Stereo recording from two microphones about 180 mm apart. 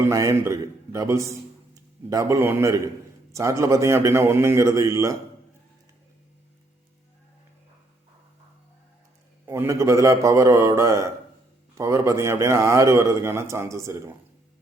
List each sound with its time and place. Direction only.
0.0 s a man's voice: 15° right (ahead or behind)
9.5 s a man's voice: 15° right (ahead or behind)